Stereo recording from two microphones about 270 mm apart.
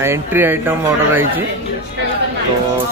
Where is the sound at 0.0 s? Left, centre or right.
Centre.